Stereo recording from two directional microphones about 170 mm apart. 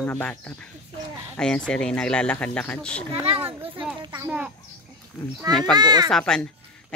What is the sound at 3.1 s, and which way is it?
Speech, 35° right (ahead or behind).